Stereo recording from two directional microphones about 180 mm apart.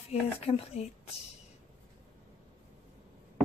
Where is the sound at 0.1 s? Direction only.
35° left (ahead or behind).